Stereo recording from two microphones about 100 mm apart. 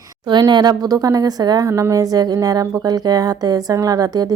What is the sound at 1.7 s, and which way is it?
A woman's voice, 30° right (ahead or behind).